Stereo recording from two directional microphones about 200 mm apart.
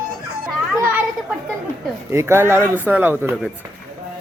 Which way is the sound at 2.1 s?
10° right (ahead or behind).